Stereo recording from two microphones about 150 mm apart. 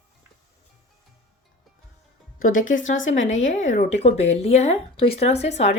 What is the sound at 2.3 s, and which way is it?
Speech, 65° left (ahead or behind).